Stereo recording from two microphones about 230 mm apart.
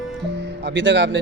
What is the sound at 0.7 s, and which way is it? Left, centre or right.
Speech, right.